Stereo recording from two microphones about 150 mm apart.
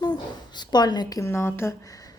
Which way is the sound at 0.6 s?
30° left (ahead or behind).